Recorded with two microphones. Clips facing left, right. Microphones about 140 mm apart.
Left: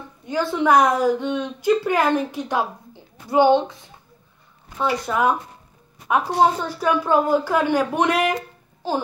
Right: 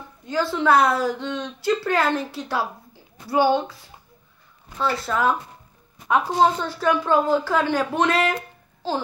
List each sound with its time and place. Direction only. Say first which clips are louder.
0.2 s a woman's voice: left 1 dB; 15° left (ahead or behind)